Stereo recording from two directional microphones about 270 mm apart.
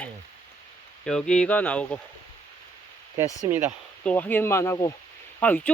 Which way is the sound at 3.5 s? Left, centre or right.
Centre.